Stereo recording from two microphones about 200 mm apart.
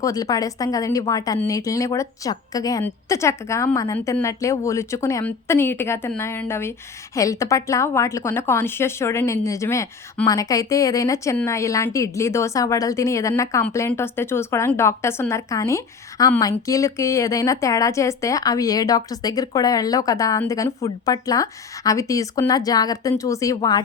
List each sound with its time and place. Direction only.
0.0 s a woman's voice: 15° left (ahead or behind)